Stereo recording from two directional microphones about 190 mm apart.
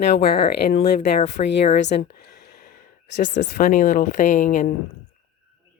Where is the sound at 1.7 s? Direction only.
65° left (ahead or behind).